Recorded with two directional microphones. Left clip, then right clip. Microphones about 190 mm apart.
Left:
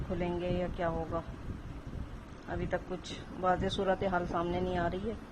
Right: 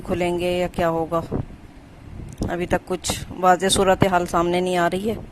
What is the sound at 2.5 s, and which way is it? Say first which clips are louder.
Speech: right 12 dB; 55° right (ahead or behind).